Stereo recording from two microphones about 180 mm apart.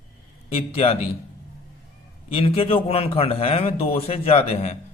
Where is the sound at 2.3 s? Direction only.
30° left (ahead or behind).